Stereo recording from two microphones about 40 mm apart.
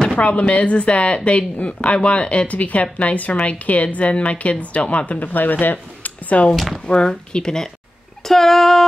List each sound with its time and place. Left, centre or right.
0.1 s speech: left
5.3 s speech: left
6.9 s speech: left; by 8.8 s centre